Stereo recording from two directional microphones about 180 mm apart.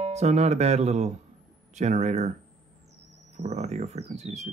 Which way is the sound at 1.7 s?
40° right (ahead or behind).